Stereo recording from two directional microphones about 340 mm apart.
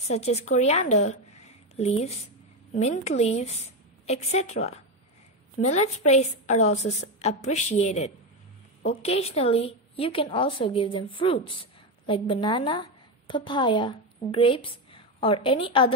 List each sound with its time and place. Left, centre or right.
0.1 s a woman's voice: centre